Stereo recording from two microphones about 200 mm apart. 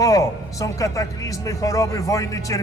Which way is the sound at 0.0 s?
15° left (ahead or behind).